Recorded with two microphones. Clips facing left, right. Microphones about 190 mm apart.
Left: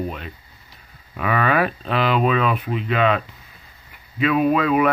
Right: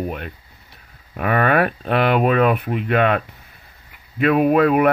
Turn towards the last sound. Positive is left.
turn(degrees=-55)  # may be behind; listen again after turning